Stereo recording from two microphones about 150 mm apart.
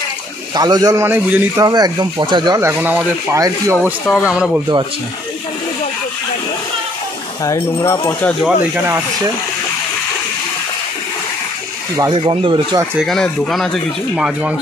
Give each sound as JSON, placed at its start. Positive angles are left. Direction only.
{"t": 0.6, "sound": "a man's voice", "side_deg": -25}
{"t": 1.7, "sound": "a man's voice", "side_deg": -25}
{"t": 2.6, "sound": "speech", "side_deg": -15}
{"t": 3.3, "sound": "a man's voice", "side_deg": -25}
{"t": 3.8, "sound": "speech", "side_deg": -5}
{"t": 7.4, "sound": "speech", "side_deg": 20}
{"t": 8.5, "sound": "speech", "side_deg": -10}
{"t": 12.1, "sound": "speech", "side_deg": -30}
{"t": 13.0, "sound": "speech", "side_deg": 0}